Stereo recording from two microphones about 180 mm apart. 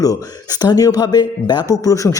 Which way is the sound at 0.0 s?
20° left (ahead or behind).